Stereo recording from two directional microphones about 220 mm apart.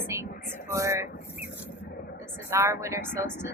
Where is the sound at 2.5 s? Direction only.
10° right (ahead or behind).